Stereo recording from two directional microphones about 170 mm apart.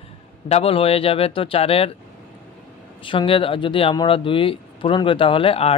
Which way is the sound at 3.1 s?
30° left (ahead or behind).